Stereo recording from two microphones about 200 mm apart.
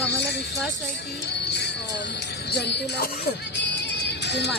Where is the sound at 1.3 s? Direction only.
55° left (ahead or behind).